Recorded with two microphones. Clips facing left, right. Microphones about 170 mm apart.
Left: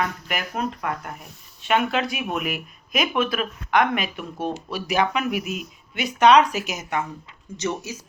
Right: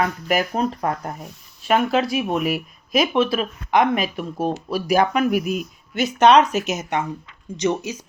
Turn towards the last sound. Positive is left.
turn(degrees=-15)  # may be behind; listen again after turning